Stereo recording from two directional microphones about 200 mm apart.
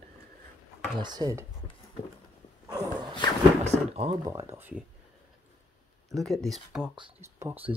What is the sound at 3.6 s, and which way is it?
Speech, 35° right (ahead or behind).